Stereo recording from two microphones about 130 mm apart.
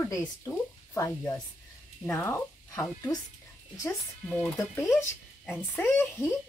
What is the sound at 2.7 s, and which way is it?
Speech, 25° left (ahead or behind).